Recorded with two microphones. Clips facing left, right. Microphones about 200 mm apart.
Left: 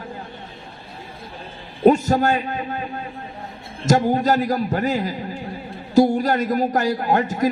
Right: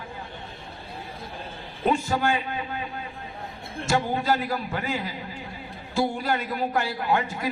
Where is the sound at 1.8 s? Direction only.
40° left (ahead or behind).